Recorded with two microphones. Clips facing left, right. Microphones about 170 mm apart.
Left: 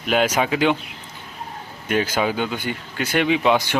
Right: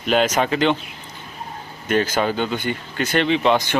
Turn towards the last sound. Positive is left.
turn(degrees=10)  # may be behind; listen again after turning